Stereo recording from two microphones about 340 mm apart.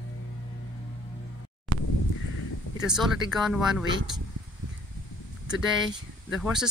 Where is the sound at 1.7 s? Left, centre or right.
Right.